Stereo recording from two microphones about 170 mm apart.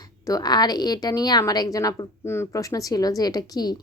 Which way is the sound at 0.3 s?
20° left (ahead or behind).